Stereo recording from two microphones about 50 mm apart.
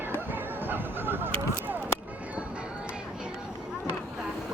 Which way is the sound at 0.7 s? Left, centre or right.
Right.